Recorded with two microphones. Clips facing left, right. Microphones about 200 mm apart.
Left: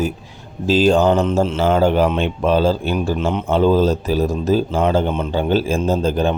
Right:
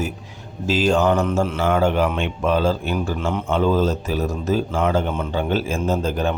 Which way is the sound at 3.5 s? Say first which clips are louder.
Left 4 dB; 30° left (ahead or behind).